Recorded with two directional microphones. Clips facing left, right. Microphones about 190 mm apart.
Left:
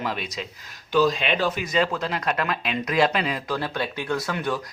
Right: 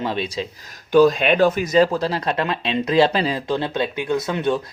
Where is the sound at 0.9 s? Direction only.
50° right (ahead or behind).